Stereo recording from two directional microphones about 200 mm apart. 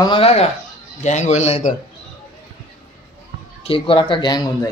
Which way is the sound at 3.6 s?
25° left (ahead or behind).